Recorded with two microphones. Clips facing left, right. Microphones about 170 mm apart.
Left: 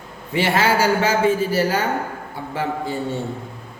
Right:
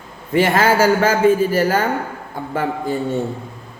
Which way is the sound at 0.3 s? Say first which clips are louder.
Right 4 dB; 50° right (ahead or behind).